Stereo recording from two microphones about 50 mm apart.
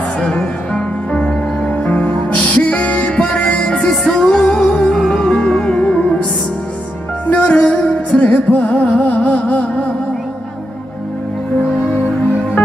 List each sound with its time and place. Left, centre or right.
0.7 s music: left
3.3 s music: left
3.6 s music: centre
5.7 s music: left
7.2 s music: left